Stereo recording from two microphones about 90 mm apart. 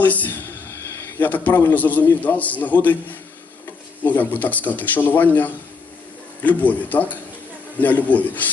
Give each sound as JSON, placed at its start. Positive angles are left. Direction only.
{"t": 0.0, "sound": "a man's voice", "side_deg": 20}